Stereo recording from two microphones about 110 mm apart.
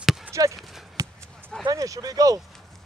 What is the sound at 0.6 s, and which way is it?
Horse, centre (ahead or behind).